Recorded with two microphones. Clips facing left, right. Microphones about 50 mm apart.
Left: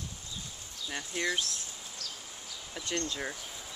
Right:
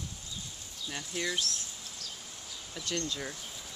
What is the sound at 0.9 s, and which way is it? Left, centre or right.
Speech, centre.